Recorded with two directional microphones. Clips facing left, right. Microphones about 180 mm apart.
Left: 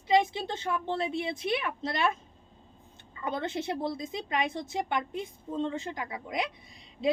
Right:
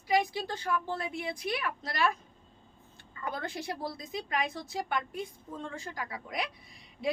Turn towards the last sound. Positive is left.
turn(degrees=20)  # may be behind; listen again after turning